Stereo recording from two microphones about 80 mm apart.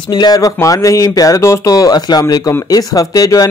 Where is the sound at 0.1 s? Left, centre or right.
Left.